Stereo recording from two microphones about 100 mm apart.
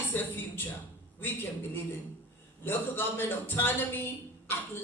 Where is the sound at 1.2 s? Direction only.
20° left (ahead or behind).